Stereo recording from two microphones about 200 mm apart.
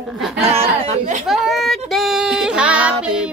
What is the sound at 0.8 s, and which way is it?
Speech, 35° right (ahead or behind).